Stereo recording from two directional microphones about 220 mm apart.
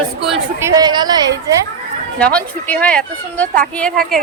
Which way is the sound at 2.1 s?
5° left (ahead or behind).